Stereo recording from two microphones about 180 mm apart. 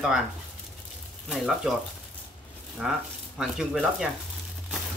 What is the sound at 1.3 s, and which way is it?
Speech, centre (ahead or behind).